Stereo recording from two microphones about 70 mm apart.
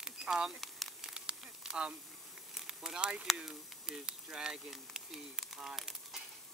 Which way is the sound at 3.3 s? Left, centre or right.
Centre.